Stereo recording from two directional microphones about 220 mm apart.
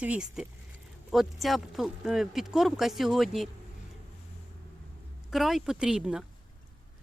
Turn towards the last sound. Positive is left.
turn(degrees=-5)  # may be behind; listen again after turning